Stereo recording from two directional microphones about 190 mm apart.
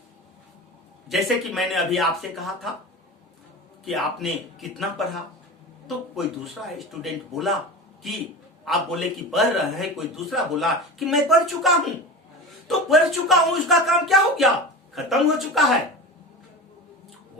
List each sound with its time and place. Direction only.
1.0 s a man's voice: centre (ahead or behind)
3.8 s a man's voice: centre (ahead or behind)